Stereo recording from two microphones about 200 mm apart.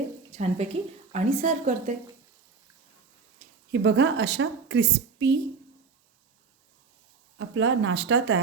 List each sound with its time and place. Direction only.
0.3 s speech: 35° right (ahead or behind)
3.7 s speech: 60° right (ahead or behind)
7.3 s speech: 75° right (ahead or behind)